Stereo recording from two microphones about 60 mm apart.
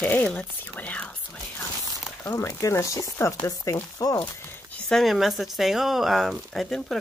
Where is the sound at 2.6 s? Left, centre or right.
Left.